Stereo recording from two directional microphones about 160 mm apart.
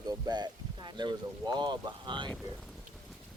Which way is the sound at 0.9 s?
25° right (ahead or behind).